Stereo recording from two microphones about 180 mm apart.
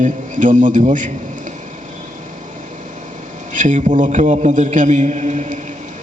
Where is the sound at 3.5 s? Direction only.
45° right (ahead or behind).